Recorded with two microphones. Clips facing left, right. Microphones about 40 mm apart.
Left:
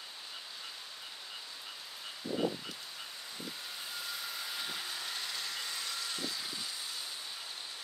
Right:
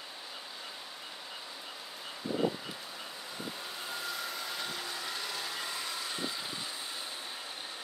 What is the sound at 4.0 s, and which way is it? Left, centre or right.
Vacuum cleaner, centre.